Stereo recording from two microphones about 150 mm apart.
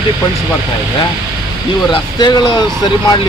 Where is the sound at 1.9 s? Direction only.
30° left (ahead or behind).